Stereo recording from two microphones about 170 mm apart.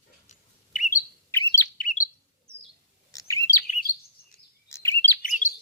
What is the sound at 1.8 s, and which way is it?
Chirp, 50° left (ahead or behind).